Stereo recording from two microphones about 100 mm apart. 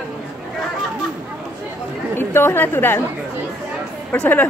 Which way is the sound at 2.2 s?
25° left (ahead or behind).